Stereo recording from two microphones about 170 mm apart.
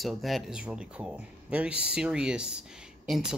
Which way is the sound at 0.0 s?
Centre (ahead or behind).